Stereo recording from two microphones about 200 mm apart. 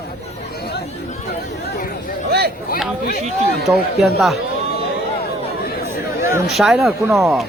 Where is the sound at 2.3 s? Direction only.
50° right (ahead or behind).